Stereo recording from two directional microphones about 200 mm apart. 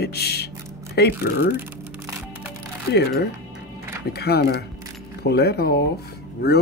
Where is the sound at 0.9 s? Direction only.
55° left (ahead or behind).